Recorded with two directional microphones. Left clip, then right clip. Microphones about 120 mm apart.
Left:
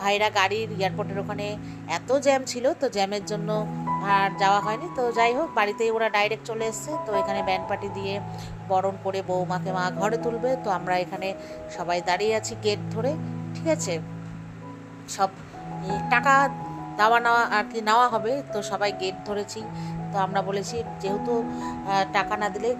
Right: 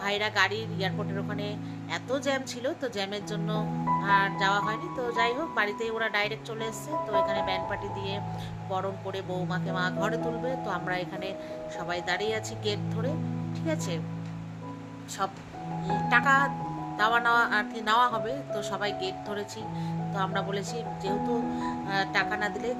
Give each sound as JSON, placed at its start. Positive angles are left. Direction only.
{"t": 0.0, "sound": "speech", "side_deg": 45}
{"t": 3.6, "sound": "music", "side_deg": 0}
{"t": 4.0, "sound": "speech", "side_deg": 50}
{"t": 15.2, "sound": "speech", "side_deg": 45}